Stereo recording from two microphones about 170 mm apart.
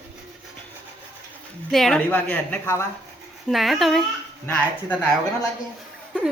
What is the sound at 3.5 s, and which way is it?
Speech, centre (ahead or behind).